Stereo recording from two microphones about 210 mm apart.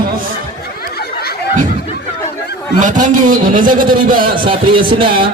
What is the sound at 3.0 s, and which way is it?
A man's voice, 40° right (ahead or behind).